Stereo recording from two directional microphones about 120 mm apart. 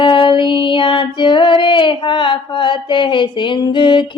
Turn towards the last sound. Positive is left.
turn(degrees=40)  # may be behind; listen again after turning